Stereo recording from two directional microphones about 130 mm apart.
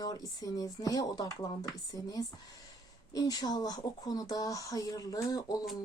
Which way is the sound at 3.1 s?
30° left (ahead or behind).